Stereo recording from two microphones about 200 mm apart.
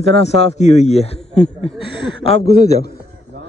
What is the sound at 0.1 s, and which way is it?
Speech, 30° left (ahead or behind).